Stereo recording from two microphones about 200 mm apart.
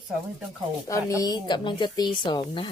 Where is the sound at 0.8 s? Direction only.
15° left (ahead or behind).